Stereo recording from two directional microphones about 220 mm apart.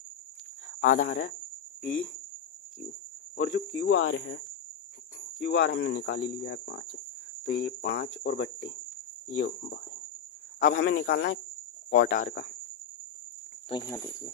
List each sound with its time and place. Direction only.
1.0 s speech: 50° left (ahead or behind)
3.3 s speech: 50° left (ahead or behind)
5.4 s speech: 50° left (ahead or behind)
10.6 s speech: 40° left (ahead or behind)
13.7 s speech: 15° left (ahead or behind)